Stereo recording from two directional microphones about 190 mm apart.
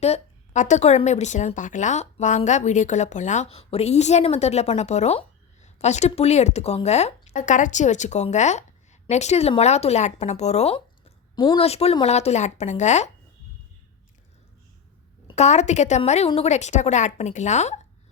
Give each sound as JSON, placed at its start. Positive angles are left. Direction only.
{"t": 0.0, "sound": "speech", "side_deg": 35}
{"t": 15.4, "sound": "speech", "side_deg": 35}